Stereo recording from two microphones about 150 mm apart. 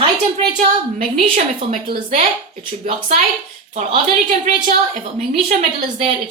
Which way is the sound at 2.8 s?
40° right (ahead or behind).